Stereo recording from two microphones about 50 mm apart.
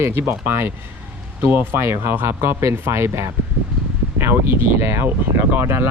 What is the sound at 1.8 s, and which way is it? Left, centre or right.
Speech, right.